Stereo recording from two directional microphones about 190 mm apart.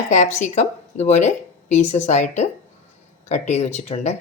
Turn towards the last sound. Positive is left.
turn(degrees=35)  # may be behind; listen again after turning